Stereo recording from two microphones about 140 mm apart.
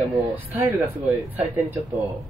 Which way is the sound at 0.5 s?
15° right (ahead or behind).